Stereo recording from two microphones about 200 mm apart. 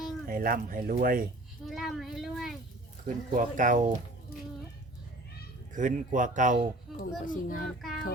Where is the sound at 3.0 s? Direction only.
40° right (ahead or behind).